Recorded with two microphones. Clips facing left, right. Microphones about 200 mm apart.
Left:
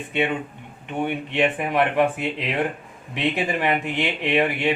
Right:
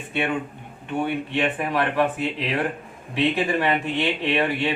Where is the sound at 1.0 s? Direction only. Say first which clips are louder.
Left 3 dB; 20° left (ahead or behind).